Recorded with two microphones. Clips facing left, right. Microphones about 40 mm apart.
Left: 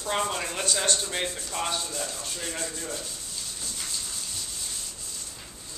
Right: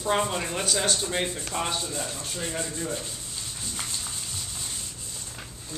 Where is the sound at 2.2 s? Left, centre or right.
Centre.